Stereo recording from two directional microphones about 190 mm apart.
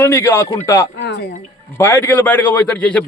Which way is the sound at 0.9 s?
60° left (ahead or behind).